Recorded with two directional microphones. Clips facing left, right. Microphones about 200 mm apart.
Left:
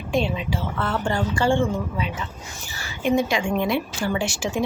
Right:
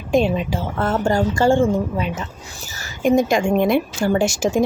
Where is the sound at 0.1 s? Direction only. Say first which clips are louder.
Right 6 dB; 45° right (ahead or behind).